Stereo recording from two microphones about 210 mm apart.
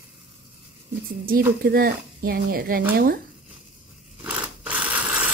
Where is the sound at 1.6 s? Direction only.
45° right (ahead or behind).